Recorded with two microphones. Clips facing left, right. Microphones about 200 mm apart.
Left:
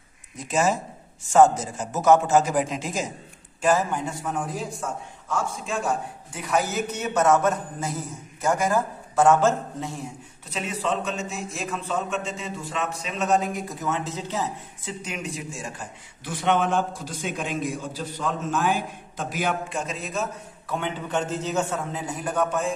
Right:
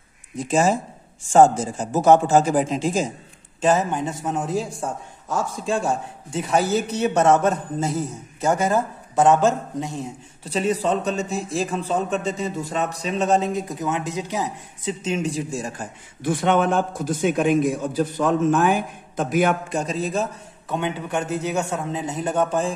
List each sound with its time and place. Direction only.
0.5 s a man's voice: 30° right (ahead or behind)
10.4 s a man's voice: 35° right (ahead or behind); by 19.8 s 55° right (ahead or behind)
19.8 s a man's voice: 35° right (ahead or behind)
20.6 s a man's voice: 20° right (ahead or behind)